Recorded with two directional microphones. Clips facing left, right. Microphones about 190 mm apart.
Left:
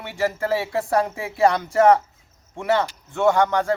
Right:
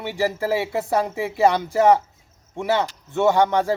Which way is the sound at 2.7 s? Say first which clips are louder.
Left 1 dB; 20° right (ahead or behind).